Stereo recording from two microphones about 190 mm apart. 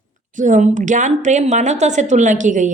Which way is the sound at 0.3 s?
40° right (ahead or behind).